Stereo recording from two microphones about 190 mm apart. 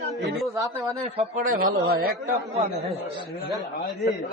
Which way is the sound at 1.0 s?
35° right (ahead or behind).